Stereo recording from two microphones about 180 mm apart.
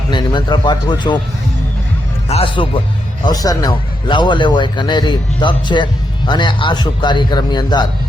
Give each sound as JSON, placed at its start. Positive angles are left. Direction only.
{"t": 0.1, "sound": "a man's voice", "side_deg": 25}
{"t": 2.3, "sound": "a man's voice", "side_deg": 30}